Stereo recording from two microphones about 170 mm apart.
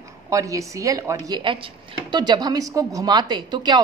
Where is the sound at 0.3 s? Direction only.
20° right (ahead or behind).